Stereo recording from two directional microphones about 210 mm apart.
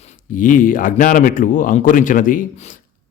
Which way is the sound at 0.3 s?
40° left (ahead or behind).